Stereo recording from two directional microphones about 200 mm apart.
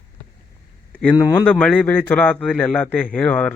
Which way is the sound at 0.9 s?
5° left (ahead or behind).